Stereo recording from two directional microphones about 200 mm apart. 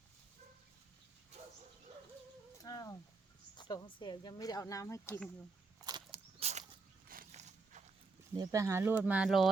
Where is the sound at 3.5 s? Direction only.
20° left (ahead or behind).